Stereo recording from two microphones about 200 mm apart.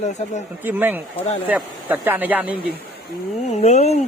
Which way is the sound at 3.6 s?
35° left (ahead or behind).